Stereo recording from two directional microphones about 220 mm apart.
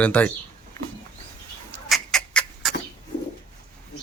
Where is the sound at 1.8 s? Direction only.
Centre (ahead or behind).